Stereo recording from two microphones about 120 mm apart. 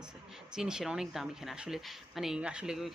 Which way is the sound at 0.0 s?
5° right (ahead or behind).